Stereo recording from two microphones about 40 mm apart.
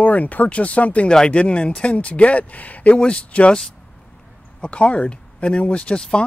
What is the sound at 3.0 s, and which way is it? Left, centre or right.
Speech, left.